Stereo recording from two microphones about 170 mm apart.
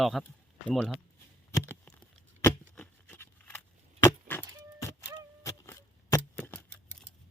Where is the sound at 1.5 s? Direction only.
15° left (ahead or behind).